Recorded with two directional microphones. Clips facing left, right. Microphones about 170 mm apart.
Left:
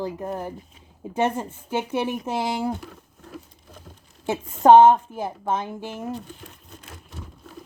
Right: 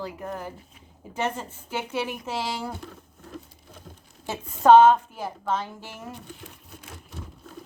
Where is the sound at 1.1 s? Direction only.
55° left (ahead or behind).